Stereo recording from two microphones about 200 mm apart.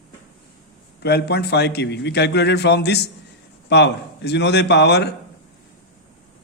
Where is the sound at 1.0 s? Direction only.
55° left (ahead or behind).